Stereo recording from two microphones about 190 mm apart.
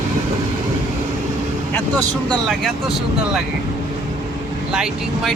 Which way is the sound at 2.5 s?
Centre (ahead or behind).